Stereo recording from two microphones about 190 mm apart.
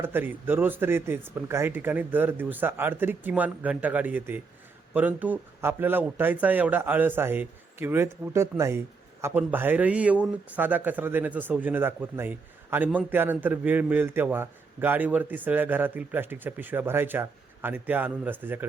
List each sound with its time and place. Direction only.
0.0 s a man's voice: 10° right (ahead or behind)